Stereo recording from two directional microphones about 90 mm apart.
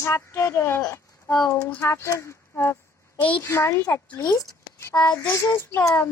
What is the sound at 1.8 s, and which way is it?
Speech, 35° left (ahead or behind).